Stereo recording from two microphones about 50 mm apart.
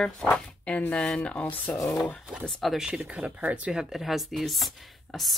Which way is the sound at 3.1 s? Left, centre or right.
Right.